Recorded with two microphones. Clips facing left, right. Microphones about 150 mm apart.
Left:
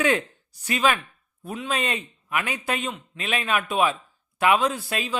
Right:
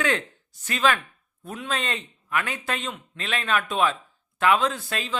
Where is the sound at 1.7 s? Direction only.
15° left (ahead or behind).